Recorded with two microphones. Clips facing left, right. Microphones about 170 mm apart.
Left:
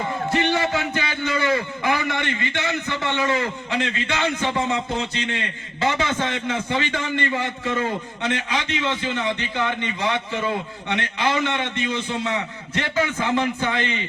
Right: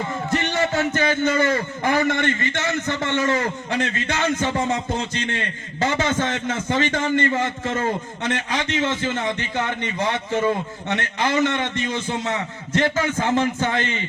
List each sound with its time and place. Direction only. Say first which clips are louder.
0.7 s a man's voice: right 4 dB; 45° right (ahead or behind)